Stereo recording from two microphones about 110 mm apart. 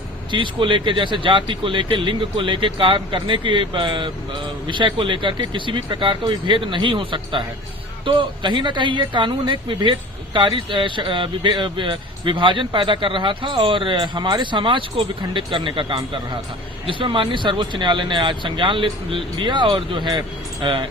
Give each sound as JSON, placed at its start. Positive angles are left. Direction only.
{"t": 0.3, "sound": "speech", "side_deg": -50}